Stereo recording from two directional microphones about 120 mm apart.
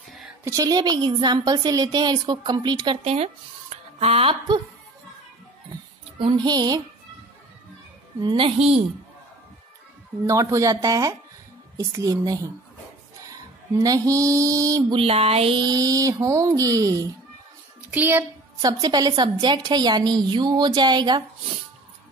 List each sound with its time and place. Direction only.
0.5 s a woman's voice: 30° right (ahead or behind)
3.0 s music: 60° right (ahead or behind)
3.7 s a sound: 60° right (ahead or behind)
6.1 s a woman's voice: 40° right (ahead or behind)
8.2 s a child's voice: 45° right (ahead or behind)
10.2 s speech: 25° right (ahead or behind)
13.3 s mantra: 30° right (ahead or behind)
15.0 s music: 55° right (ahead or behind)
15.6 s a woman's voice: 35° right (ahead or behind)
17.9 s a woman's voice: 15° right (ahead or behind)
18.6 s a woman's voice: 35° right (ahead or behind)